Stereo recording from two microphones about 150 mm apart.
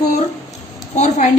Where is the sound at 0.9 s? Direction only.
50° left (ahead or behind).